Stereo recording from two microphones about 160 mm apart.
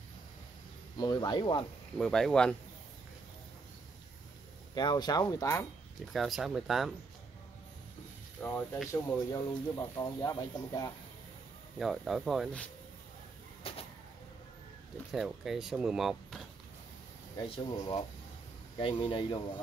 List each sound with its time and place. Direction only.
0.9 s speech: 25° left (ahead or behind)
2.0 s speech: 5° left (ahead or behind)
4.7 s speech: 25° left (ahead or behind)
6.1 s speech: centre (ahead or behind)
8.4 s speech: 5° left (ahead or behind)
8.9 s speech: 20° left (ahead or behind)
11.8 s speech: centre (ahead or behind)
13.7 s vehicle: 40° left (ahead or behind)
15.1 s speech: centre (ahead or behind)
17.4 s speech: 25° left (ahead or behind)